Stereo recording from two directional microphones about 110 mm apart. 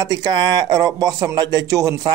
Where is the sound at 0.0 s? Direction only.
40° right (ahead or behind).